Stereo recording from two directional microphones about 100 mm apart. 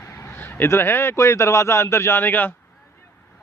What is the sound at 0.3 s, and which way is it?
A man's voice, 20° left (ahead or behind).